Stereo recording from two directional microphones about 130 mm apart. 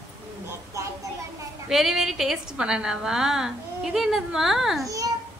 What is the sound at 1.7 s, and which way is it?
A woman's voice, centre (ahead or behind).